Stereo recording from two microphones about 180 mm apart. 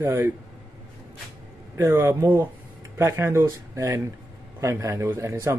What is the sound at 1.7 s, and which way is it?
Speech, 15° right (ahead or behind).